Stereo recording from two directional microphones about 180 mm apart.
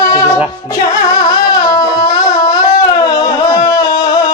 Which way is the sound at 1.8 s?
20° left (ahead or behind).